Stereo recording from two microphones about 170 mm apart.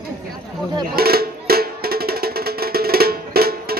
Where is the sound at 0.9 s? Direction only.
65° right (ahead or behind).